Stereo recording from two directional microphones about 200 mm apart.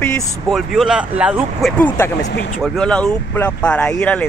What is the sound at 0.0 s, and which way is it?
Speech, 5° left (ahead or behind).